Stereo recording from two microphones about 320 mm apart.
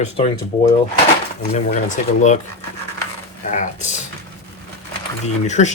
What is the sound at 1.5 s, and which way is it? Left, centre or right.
Speech, left.